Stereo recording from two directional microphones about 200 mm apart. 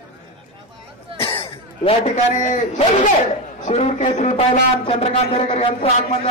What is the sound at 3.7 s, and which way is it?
A man's voice, 35° left (ahead or behind).